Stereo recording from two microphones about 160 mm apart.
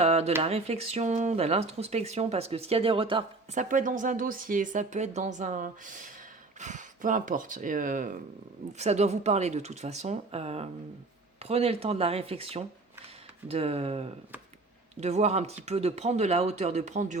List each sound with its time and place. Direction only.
0.0 s a sound: 40° right (ahead or behind)
0.4 s speech: 40° right (ahead or behind)
3.5 s speech: 55° right (ahead or behind)
8.8 s speech: 45° right (ahead or behind)